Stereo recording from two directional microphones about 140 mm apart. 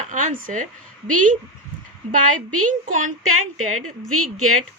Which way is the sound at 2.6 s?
65° right (ahead or behind).